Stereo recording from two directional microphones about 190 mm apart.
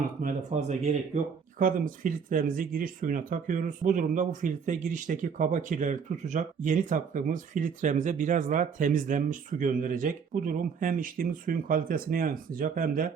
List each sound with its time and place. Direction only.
0.2 s speech: 40° right (ahead or behind)